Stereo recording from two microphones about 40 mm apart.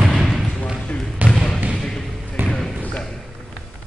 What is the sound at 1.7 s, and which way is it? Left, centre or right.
Basketball bounce, centre.